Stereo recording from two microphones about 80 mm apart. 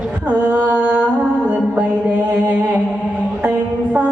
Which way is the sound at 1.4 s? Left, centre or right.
Centre.